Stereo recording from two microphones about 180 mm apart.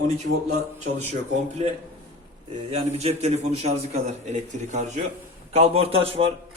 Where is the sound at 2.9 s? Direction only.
35° right (ahead or behind).